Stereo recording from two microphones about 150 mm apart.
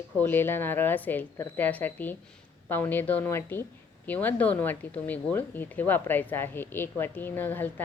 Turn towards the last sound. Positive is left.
turn(degrees=15)  # may be behind; listen again after turning